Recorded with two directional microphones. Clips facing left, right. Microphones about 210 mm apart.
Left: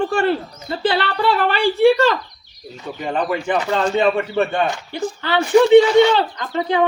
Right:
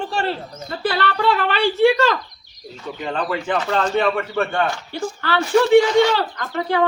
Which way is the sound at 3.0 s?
15° left (ahead or behind).